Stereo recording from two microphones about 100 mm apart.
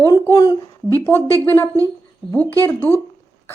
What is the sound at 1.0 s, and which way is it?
Speech, 20° left (ahead or behind).